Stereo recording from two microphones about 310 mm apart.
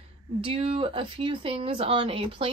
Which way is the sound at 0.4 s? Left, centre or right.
Centre.